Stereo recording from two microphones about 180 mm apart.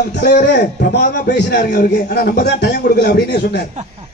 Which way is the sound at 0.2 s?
70° left (ahead or behind).